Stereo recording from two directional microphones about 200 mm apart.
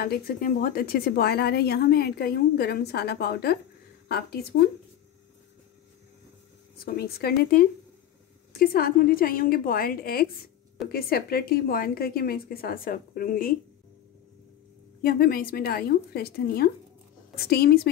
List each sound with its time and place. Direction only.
0.0 s a woman's voice: 50° left (ahead or behind)
6.8 s a woman's voice: 50° left (ahead or behind)
15.0 s a woman's voice: 50° left (ahead or behind)